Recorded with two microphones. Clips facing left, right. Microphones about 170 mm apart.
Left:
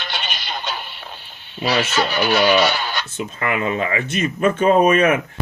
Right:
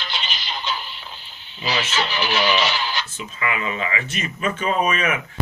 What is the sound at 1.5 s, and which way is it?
Speech, 55° left (ahead or behind).